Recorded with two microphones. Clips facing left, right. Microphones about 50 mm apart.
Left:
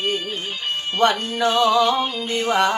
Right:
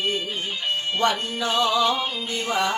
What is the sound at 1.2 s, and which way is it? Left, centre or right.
Music, left.